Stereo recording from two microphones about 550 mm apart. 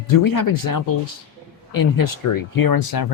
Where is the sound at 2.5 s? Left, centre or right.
Left.